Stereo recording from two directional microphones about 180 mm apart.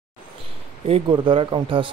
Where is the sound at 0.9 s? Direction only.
30° right (ahead or behind).